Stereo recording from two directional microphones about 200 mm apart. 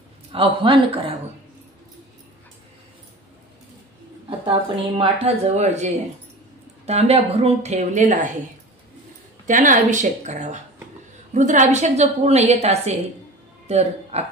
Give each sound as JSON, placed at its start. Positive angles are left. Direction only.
{"t": 0.3, "sound": "a woman's voice", "side_deg": -25}
{"t": 4.5, "sound": "a woman's voice", "side_deg": -30}
{"t": 6.9, "sound": "a woman's voice", "side_deg": -30}
{"t": 9.5, "sound": "a woman's voice", "side_deg": -40}